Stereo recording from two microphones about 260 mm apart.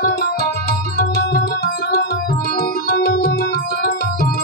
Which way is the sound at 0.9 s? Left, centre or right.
Left.